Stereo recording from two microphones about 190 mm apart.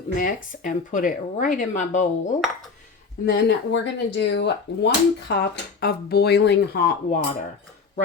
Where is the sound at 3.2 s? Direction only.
65° left (ahead or behind).